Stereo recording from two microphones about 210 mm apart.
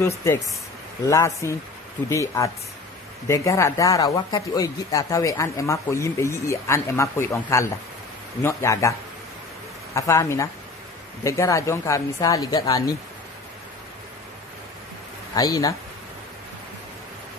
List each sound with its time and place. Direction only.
0.0 s speech: 15° left (ahead or behind)
9.9 s speech: 15° left (ahead or behind)
15.3 s speech: 15° left (ahead or behind)